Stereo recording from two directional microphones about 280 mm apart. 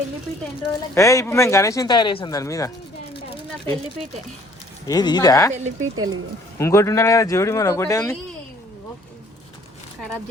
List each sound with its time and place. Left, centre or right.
0.9 s speech: centre
4.9 s speech: centre
6.0 s speech: right
6.6 s speech: centre